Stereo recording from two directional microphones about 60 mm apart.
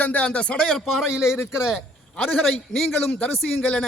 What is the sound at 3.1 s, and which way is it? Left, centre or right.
Speech, left.